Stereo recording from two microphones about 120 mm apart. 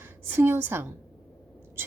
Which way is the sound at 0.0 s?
20° right (ahead or behind).